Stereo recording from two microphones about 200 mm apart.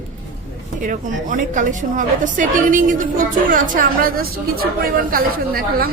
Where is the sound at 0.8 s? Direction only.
40° right (ahead or behind).